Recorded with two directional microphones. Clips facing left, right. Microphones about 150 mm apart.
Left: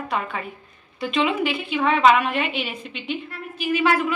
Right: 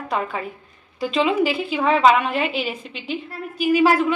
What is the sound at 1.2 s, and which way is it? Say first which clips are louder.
A woman's voice: right 3 dB; 35° right (ahead or behind).